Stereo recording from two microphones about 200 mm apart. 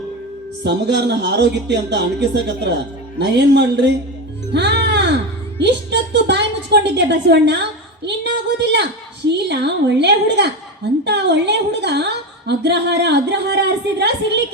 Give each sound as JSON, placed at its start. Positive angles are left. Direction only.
{"t": 0.6, "sound": "a woman's voice", "side_deg": -60}
{"t": 4.5, "sound": "music", "side_deg": -60}
{"t": 5.5, "sound": "a sound", "side_deg": -60}
{"t": 6.9, "sound": "a woman's voice", "side_deg": -60}